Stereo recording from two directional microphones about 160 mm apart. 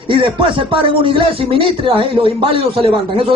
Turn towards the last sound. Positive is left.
turn(degrees=-35)  # may be behind; listen again after turning